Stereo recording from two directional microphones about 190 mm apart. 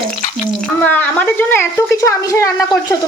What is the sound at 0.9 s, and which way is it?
Speech, 10° left (ahead or behind).